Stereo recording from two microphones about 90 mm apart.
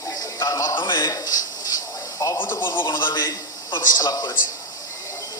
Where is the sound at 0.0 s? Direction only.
40° left (ahead or behind).